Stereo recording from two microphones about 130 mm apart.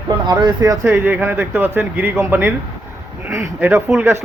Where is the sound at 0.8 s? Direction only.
15° right (ahead or behind).